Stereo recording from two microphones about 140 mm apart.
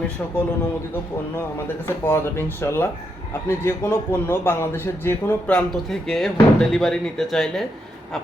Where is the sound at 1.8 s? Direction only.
15° left (ahead or behind).